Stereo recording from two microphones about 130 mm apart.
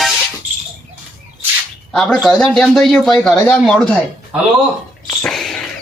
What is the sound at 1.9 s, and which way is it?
A man's voice, 5° left (ahead or behind).